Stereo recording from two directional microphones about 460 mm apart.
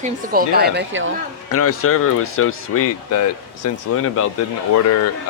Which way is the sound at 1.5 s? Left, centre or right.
Left.